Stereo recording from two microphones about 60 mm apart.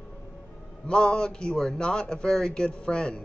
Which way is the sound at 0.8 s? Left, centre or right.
Centre.